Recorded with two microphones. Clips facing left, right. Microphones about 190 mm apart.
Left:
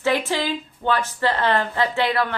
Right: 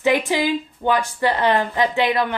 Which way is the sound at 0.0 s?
15° right (ahead or behind).